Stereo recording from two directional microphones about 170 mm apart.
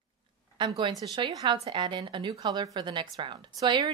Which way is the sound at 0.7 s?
25° right (ahead or behind).